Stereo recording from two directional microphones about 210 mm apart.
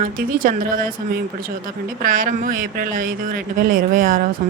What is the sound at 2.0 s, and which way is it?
Speech, 40° right (ahead or behind).